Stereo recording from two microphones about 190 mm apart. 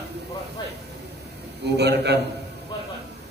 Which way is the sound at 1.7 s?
60° right (ahead or behind).